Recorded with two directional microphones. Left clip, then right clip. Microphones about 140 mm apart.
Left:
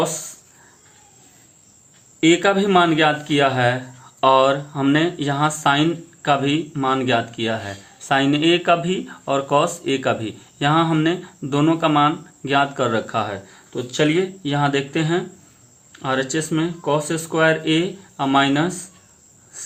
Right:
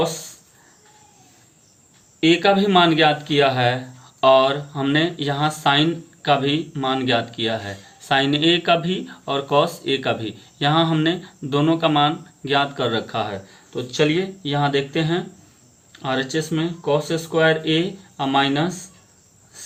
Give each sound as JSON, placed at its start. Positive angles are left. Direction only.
{"t": 2.2, "sound": "speech", "side_deg": 40}